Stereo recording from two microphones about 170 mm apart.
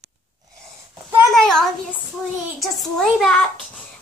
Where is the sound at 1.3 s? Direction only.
5° left (ahead or behind).